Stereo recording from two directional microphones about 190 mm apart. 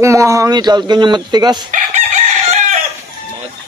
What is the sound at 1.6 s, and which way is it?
Chicken, 40° right (ahead or behind).